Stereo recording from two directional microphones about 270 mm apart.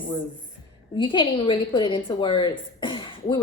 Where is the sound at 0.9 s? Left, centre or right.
Centre.